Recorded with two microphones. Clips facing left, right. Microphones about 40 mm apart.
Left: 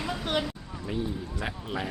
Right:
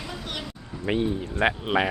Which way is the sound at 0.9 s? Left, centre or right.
Right.